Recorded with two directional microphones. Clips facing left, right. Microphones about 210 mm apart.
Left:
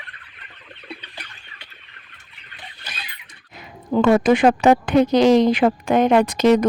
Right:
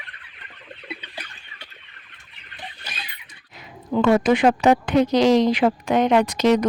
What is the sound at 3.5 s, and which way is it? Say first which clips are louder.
A woman's voice: left 3 dB; 45° left (ahead or behind).